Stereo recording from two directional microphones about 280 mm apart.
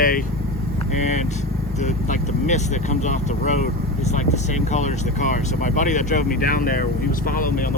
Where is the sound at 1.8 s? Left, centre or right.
Left.